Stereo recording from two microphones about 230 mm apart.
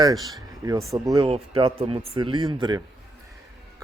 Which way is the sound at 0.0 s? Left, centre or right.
Centre.